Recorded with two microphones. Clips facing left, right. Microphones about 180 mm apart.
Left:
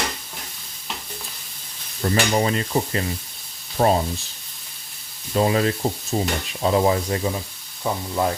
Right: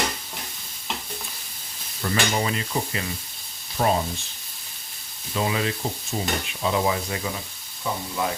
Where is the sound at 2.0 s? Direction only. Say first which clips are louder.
Left 4 dB; 35° left (ahead or behind).